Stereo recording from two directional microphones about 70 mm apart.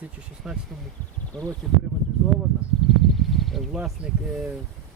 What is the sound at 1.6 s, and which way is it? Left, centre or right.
Speech, centre.